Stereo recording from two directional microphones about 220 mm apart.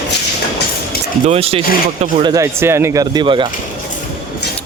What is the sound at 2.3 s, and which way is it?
Speech, 10° right (ahead or behind).